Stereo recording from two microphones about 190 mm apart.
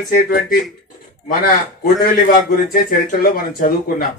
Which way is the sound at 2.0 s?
50° left (ahead or behind).